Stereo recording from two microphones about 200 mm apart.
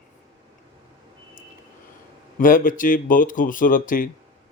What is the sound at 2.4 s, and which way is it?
Speech, 45° left (ahead or behind).